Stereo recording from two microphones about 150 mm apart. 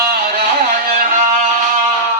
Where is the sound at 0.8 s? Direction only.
70° right (ahead or behind).